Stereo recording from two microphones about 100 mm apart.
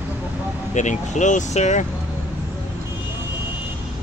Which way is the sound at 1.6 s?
90° left.